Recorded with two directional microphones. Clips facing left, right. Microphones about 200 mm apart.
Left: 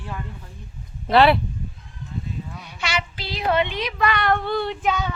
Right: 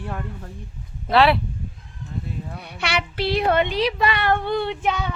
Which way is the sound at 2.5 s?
60° right (ahead or behind).